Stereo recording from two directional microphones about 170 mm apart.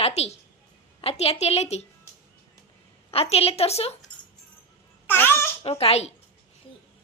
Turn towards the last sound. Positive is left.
turn(degrees=35)  # may be behind; listen again after turning